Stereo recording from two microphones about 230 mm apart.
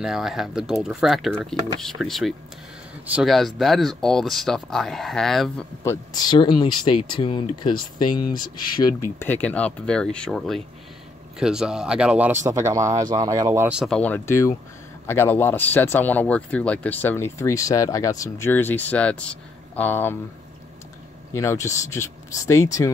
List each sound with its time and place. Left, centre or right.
0.0 s speech: centre
5.9 s speech: centre
21.3 s speech: centre